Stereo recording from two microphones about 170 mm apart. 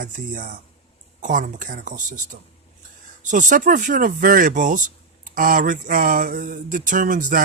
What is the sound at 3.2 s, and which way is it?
Speech, 50° right (ahead or behind).